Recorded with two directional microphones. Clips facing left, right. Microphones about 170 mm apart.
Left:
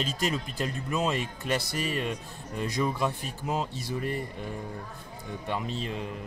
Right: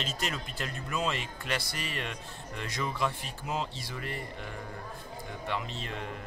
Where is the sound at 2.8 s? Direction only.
20° left (ahead or behind).